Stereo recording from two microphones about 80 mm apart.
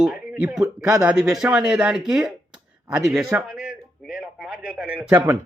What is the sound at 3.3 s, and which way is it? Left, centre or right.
Speech, centre.